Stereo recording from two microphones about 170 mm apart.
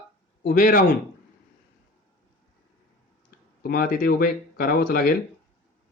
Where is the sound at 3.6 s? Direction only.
65° left (ahead or behind).